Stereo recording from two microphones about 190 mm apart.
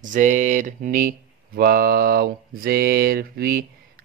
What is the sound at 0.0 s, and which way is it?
Speech, 40° right (ahead or behind).